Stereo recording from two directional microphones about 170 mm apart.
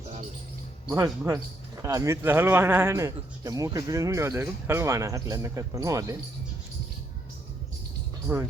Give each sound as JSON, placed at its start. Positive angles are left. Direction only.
{"t": 0.9, "sound": "speech", "side_deg": -20}
{"t": 8.3, "sound": "speech", "side_deg": -10}